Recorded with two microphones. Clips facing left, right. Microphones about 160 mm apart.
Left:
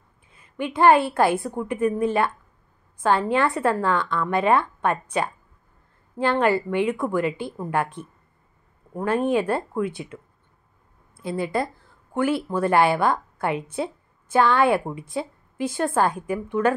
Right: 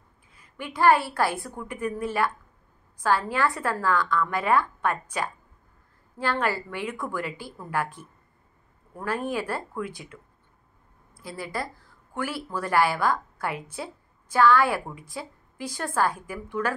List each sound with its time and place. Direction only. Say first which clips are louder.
0.3 s a woman's voice: left 9 dB; 25° left (ahead or behind)
6.4 s a woman's voice: left 8 dB; 20° left (ahead or behind)
9.0 s a woman's voice: left 7 dB; 20° left (ahead or behind)
11.2 s a woman's voice: left 8 dB; 25° left (ahead or behind)